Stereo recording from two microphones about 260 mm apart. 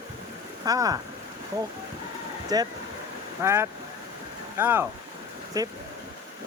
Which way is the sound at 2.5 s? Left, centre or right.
Centre.